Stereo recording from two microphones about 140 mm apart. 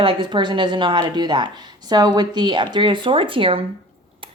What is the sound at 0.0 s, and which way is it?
Speech, 35° right (ahead or behind).